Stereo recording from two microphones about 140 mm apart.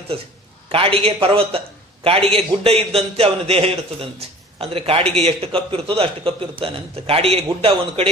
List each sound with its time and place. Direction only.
0.7 s a man's voice: 40° right (ahead or behind)